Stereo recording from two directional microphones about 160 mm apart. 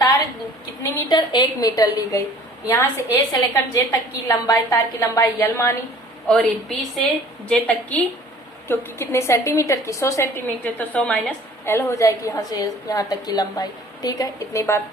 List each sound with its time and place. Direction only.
0.8 s a woman's voice: 25° left (ahead or behind)
6.2 s a woman's voice: 5° left (ahead or behind); by 14.8 s 20° left (ahead or behind)